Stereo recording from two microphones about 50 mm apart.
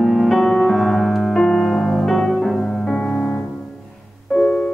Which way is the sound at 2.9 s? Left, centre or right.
Left.